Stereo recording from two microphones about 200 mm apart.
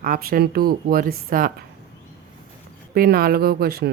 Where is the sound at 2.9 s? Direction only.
50° right (ahead or behind).